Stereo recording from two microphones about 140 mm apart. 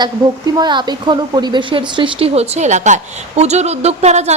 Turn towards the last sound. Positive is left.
turn(degrees=-50)  # may be behind; listen again after turning